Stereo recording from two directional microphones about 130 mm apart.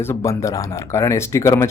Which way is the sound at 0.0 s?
20° left (ahead or behind).